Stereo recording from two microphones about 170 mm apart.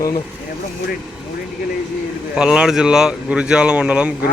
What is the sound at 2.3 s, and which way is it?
Speech, 5° right (ahead or behind).